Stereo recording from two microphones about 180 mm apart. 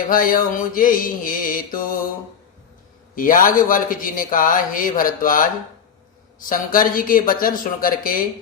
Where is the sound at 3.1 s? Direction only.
50° left (ahead or behind).